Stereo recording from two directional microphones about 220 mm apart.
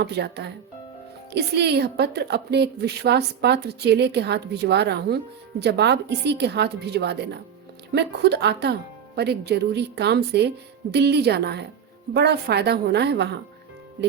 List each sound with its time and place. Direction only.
0.0 s a woman's voice: 50° right (ahead or behind)